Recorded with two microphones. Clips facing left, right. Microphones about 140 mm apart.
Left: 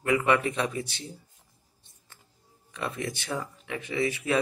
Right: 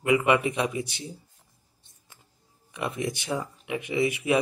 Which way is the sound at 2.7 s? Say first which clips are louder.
Right 3 dB; 15° right (ahead or behind).